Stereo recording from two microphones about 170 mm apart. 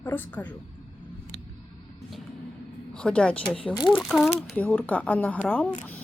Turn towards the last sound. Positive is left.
turn(degrees=10)  # may be behind; listen again after turning